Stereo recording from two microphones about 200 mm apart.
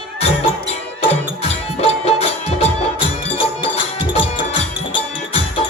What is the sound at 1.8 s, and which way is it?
Music, 30° left (ahead or behind).